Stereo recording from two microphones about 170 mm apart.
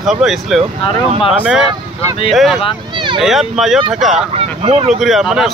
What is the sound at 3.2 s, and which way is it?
Speech, centre (ahead or behind).